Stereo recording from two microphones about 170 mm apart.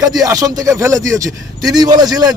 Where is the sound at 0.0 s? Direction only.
20° right (ahead or behind).